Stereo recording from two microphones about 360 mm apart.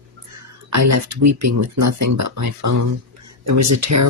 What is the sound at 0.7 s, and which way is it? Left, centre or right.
Speech, right.